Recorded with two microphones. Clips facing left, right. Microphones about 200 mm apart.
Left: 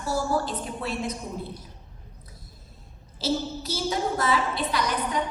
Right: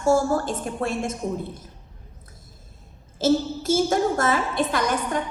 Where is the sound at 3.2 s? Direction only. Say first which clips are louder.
Right 7 dB; 50° right (ahead or behind).